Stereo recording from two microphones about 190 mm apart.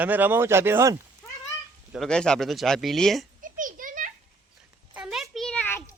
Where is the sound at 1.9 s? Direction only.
5° left (ahead or behind).